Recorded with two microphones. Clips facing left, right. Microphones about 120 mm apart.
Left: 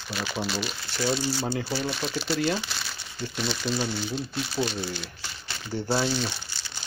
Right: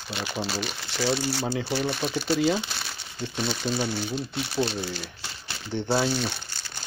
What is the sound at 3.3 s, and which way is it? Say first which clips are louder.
Speech: right 1 dB; 40° right (ahead or behind).